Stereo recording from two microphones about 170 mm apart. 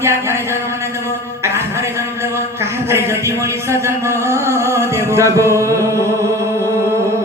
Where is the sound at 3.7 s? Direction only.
15° right (ahead or behind).